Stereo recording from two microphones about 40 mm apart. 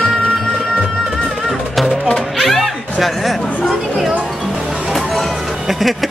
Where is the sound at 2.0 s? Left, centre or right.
Centre.